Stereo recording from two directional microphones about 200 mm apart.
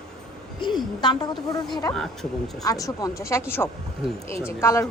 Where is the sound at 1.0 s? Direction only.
20° left (ahead or behind).